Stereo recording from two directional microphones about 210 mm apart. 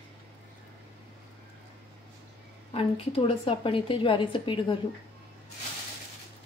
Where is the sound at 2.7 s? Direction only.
25° left (ahead or behind).